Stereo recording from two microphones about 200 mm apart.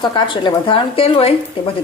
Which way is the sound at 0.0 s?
20° left (ahead or behind).